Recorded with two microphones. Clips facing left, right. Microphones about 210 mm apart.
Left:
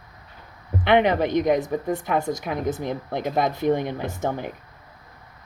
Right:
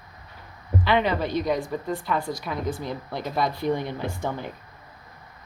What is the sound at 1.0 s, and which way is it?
A woman's voice, 20° left (ahead or behind).